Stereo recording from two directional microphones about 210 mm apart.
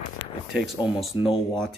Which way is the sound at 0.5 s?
Centre (ahead or behind).